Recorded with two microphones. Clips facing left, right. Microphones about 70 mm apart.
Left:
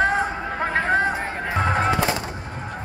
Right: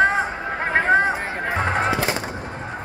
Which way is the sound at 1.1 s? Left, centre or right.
Centre.